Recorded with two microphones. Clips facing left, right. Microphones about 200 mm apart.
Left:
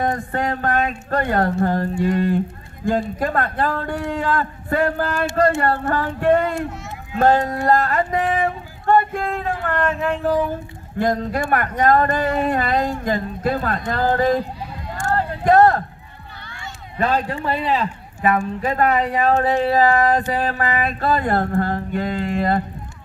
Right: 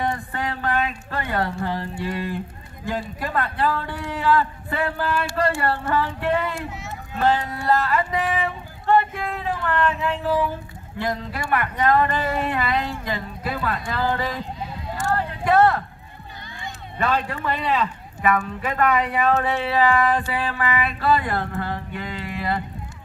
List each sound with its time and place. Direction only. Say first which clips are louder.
0.0 s speech: left 4 dB; 45° left (ahead or behind)
15.1 s a sound: left 4 dB; 45° left (ahead or behind)
17.0 s speech: left 3 dB; 40° left (ahead or behind)